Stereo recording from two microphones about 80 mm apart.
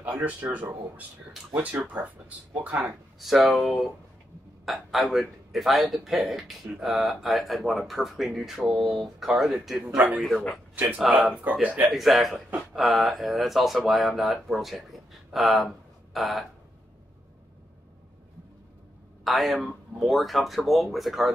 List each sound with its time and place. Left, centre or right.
0.0 s speech: right
2.9 s speech: centre
9.8 s speech: centre
11.0 s speech: centre
11.6 s speech: centre
11.9 s speech: centre
19.2 s speech: centre